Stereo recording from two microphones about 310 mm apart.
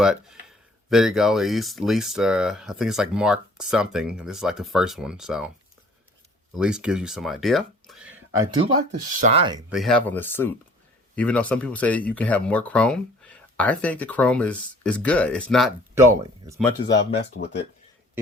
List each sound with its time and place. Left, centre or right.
0.0 s speech: centre
6.6 s speech: centre
8.4 s speech: centre
9.6 s speech: centre
17.3 s speech: left